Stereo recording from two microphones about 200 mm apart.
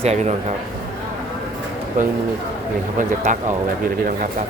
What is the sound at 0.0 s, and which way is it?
Speech, 35° right (ahead or behind).